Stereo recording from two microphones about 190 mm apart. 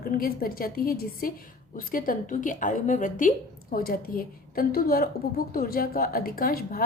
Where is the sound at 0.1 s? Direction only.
50° left (ahead or behind).